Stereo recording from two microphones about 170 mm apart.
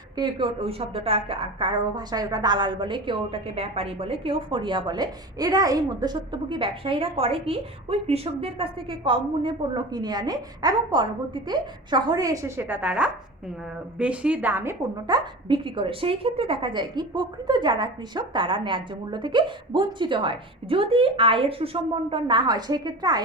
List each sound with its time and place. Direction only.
0.2 s a woman's voice: 30° right (ahead or behind)